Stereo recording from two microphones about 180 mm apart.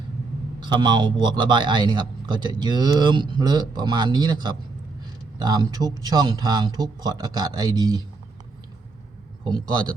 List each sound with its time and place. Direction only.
0.6 s a man's voice: 25° right (ahead or behind)
9.4 s a man's voice: 25° right (ahead or behind)